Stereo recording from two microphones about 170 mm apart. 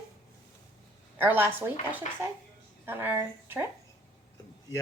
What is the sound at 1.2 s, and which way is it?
Speech, 10° right (ahead or behind).